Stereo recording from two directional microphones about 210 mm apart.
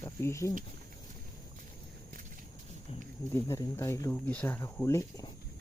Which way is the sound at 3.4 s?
15° left (ahead or behind).